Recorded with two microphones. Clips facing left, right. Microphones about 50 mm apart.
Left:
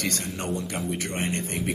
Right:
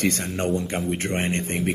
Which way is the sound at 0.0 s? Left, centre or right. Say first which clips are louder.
Right 6 dB; right.